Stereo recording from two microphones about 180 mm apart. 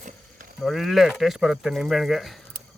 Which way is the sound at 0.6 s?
Centre (ahead or behind).